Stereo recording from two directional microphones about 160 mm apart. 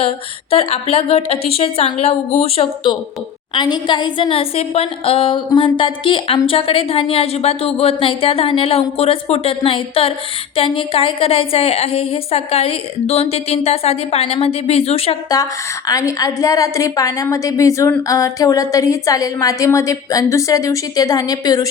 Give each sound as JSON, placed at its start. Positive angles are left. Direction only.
{"t": 0.5, "sound": "a woman's voice", "side_deg": 35}
{"t": 15.9, "sound": "a woman's voice", "side_deg": 20}